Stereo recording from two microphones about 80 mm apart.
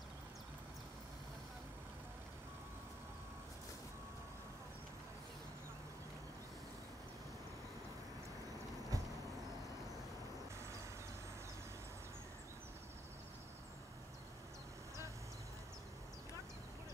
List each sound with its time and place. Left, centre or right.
8.9 s vehicle: right